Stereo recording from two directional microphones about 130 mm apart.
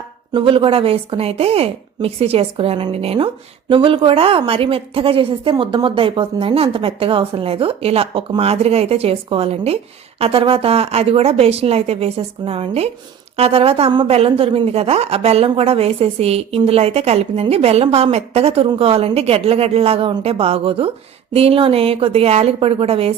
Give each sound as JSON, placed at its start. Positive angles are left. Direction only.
{"t": 0.3, "sound": "a woman's voice", "side_deg": -45}
{"t": 3.7, "sound": "a woman's voice", "side_deg": -40}